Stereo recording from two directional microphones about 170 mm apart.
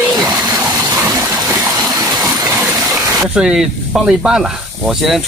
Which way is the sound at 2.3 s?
15° right (ahead or behind).